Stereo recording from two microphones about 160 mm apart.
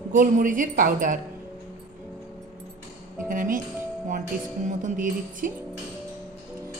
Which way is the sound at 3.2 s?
55° right (ahead or behind).